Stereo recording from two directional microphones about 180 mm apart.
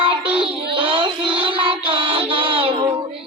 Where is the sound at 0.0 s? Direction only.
30° right (ahead or behind).